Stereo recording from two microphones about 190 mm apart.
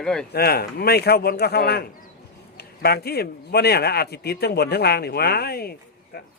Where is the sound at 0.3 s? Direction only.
55° left (ahead or behind).